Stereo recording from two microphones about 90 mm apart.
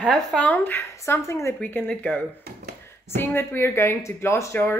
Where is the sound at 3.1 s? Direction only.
25° left (ahead or behind).